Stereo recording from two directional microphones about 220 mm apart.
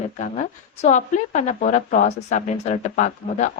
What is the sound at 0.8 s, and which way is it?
A woman's voice, 30° left (ahead or behind).